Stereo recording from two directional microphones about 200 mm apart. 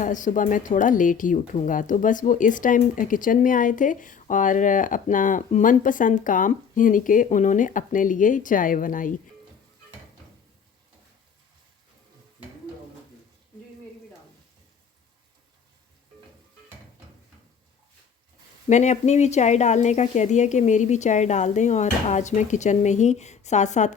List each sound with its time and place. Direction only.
0.0 s a woman's voice: 40° left (ahead or behind)
18.7 s a woman's voice: 35° left (ahead or behind)